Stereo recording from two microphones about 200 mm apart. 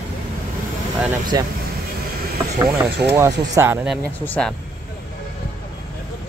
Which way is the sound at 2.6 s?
15° right (ahead or behind).